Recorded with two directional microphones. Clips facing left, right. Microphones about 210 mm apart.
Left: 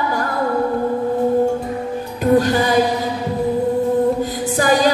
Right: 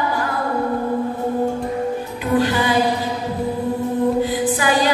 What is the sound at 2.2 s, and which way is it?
Music, 45° left (ahead or behind).